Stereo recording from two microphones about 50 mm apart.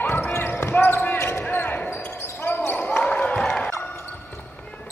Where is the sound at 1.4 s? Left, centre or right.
Left.